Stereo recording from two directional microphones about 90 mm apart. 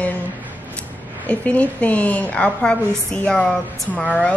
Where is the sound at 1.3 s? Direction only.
15° left (ahead or behind).